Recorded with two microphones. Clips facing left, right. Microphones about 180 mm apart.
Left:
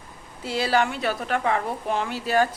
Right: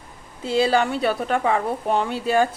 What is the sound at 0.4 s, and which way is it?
A woman's voice, 30° right (ahead or behind).